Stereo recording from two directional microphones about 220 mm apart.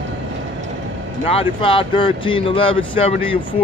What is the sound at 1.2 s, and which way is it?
Speech, 25° left (ahead or behind).